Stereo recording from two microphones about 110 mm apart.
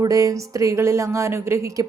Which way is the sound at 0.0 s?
30° right (ahead or behind).